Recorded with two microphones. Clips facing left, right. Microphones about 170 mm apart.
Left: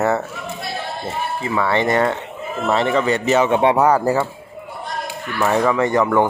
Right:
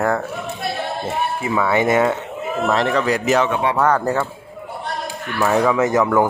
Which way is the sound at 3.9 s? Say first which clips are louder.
Left 2 dB; 10° left (ahead or behind).